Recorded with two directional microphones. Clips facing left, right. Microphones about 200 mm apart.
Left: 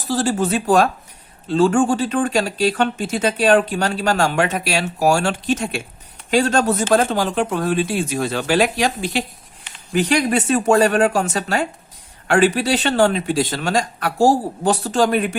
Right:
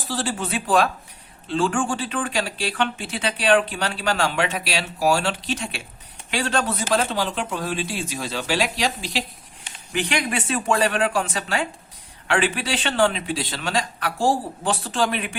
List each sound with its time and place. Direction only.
0.0 s speech: 45° left (ahead or behind)
9.9 s speech: 40° left (ahead or behind)